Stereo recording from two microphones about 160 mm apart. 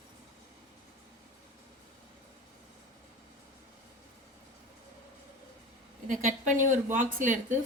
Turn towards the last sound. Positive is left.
turn(degrees=-55)  # may be behind; listen again after turning